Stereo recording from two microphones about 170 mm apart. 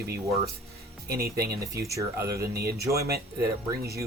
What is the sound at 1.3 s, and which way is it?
Speech, 20° right (ahead or behind).